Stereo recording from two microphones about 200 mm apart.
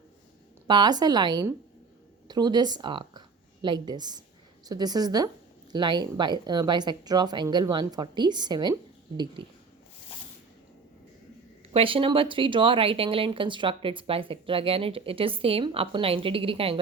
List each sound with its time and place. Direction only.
0.7 s speech: 20° right (ahead or behind)
11.7 s speech: 25° right (ahead or behind)